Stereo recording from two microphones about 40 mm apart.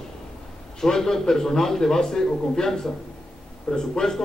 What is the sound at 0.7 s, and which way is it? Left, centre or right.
A man's voice, centre.